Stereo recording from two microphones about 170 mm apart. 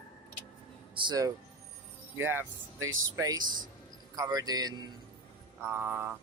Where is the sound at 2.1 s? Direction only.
10° right (ahead or behind).